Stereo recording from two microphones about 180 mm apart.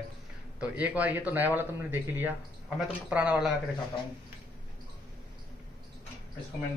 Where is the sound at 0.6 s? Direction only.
10° right (ahead or behind).